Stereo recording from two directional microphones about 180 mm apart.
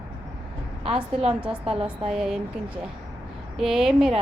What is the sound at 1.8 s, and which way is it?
Speech, 35° right (ahead or behind).